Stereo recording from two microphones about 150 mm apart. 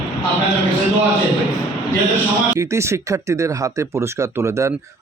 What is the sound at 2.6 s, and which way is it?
Speech, 20° right (ahead or behind).